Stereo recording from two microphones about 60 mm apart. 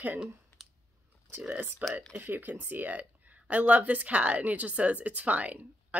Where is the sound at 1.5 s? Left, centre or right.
Right.